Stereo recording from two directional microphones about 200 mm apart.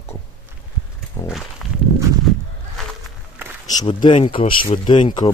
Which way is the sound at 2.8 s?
Centre (ahead or behind).